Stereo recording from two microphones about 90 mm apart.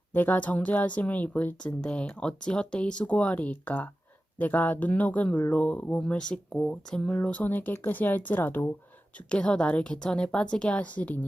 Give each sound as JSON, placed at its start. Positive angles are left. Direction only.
{"t": 0.1, "sound": "speech", "side_deg": 20}